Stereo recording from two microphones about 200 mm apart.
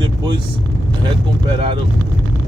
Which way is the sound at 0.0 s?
20° right (ahead or behind).